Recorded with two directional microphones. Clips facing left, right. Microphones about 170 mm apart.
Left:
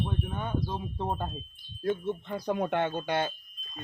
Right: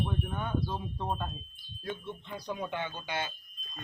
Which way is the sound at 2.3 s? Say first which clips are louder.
Left 6 dB; 55° left (ahead or behind).